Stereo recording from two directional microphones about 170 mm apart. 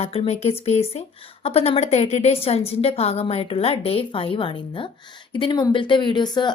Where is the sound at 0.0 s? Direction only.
35° left (ahead or behind).